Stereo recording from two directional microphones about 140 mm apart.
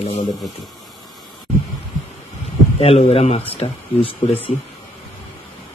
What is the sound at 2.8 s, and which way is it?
Speech, 45° left (ahead or behind).